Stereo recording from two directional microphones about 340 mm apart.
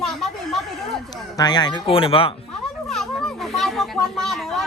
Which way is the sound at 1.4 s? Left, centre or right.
Centre.